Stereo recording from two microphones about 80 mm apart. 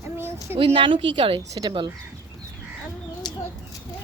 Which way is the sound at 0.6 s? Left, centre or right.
Right.